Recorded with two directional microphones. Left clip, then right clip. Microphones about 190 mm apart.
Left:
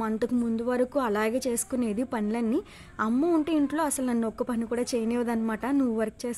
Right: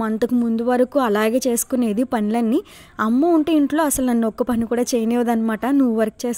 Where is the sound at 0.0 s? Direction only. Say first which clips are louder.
Right 8 dB; 35° right (ahead or behind).